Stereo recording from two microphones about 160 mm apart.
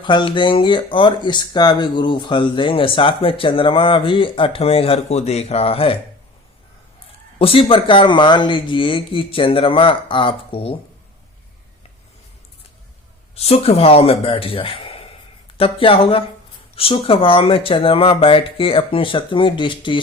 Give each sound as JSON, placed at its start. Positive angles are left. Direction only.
{"t": 0.0, "sound": "speech", "side_deg": 30}
{"t": 7.3, "sound": "speech", "side_deg": 35}
{"t": 13.3, "sound": "speech", "side_deg": 40}